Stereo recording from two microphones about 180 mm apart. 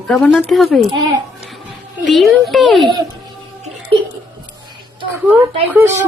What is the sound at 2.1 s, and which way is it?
Speech, centre (ahead or behind).